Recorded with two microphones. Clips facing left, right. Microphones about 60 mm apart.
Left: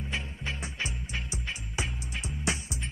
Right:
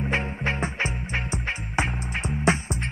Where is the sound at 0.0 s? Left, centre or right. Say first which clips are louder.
Right 10 dB; right.